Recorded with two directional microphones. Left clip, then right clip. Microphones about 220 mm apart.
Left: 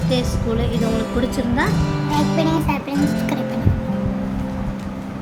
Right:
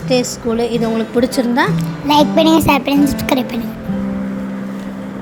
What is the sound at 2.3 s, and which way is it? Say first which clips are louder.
Music: right 9 dB; 35° right (ahead or behind).